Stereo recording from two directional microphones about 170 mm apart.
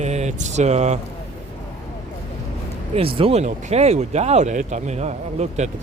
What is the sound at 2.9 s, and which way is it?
Speech, 35° right (ahead or behind).